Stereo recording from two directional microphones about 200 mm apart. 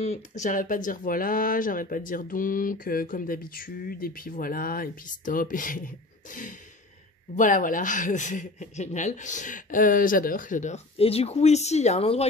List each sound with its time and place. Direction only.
0.0 s speech: 35° left (ahead or behind)